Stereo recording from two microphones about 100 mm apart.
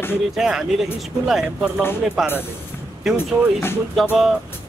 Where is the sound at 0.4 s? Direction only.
5° right (ahead or behind).